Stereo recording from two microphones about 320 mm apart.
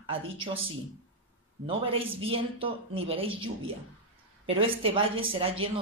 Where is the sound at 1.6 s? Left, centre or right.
Centre.